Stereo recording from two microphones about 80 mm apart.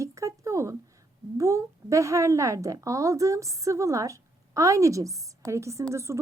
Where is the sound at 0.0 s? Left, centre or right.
Right.